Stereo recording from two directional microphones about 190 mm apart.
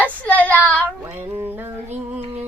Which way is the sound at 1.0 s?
10° right (ahead or behind).